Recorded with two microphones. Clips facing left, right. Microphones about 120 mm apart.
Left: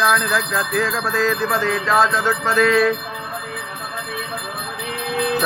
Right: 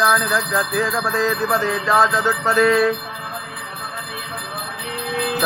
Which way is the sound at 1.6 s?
25° right (ahead or behind).